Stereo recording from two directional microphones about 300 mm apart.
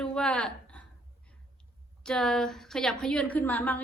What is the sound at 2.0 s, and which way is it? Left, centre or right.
A woman's voice, centre.